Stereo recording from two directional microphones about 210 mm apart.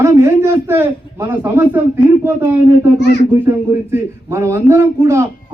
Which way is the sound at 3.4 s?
10° right (ahead or behind).